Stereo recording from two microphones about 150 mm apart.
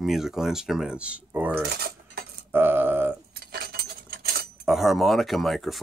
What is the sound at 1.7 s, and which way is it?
Cutlery, 90° right.